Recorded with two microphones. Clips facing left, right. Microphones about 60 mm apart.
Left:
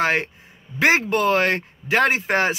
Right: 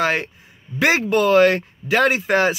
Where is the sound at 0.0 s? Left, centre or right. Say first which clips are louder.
Even; left.